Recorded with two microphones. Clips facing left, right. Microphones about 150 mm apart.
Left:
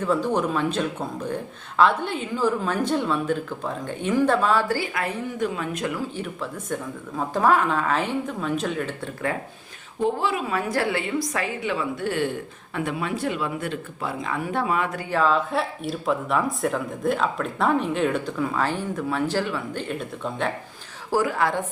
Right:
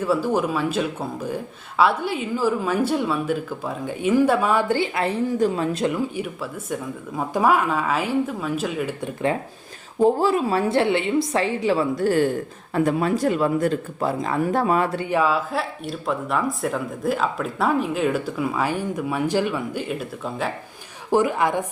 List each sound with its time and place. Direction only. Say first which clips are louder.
0.0 s speech: right 2 dB; 10° right (ahead or behind)
10.0 s a woman's voice: right 6 dB; 40° right (ahead or behind)
15.1 s speech: left 1 dB; 10° right (ahead or behind)
21.1 s a woman's voice: right 3 dB; 20° right (ahead or behind)